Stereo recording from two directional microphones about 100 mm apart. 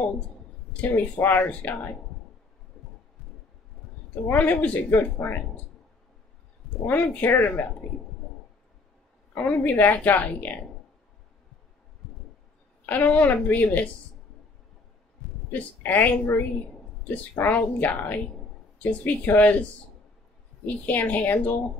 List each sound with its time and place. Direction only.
0.7 s a woman's voice: 15° left (ahead or behind)
4.3 s speech: 15° left (ahead or behind)
6.9 s a woman's voice: 15° left (ahead or behind)
9.3 s a woman's voice: 20° left (ahead or behind)
12.8 s a woman's voice: 15° left (ahead or behind)
15.8 s a woman's voice: 15° left (ahead or behind)